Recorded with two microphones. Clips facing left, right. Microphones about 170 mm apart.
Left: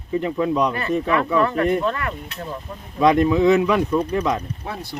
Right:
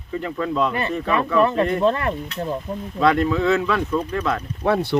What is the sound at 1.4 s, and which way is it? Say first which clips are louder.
Speech: right 1 dB; 20° right (ahead or behind).